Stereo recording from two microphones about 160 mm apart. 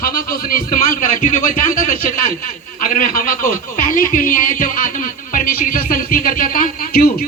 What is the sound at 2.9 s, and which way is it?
Speech, 55° left (ahead or behind).